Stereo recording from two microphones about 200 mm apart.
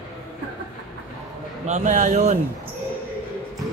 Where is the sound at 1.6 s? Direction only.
40° right (ahead or behind).